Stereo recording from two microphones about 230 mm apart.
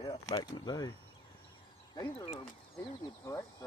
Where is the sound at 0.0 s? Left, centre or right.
Centre.